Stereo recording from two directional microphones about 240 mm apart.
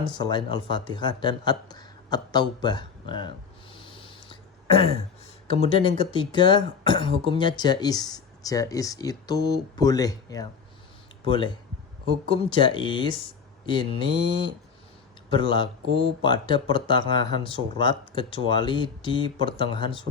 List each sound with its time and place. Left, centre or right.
0.2 s speech: centre
3.8 s a sound: left
5.5 s speech: left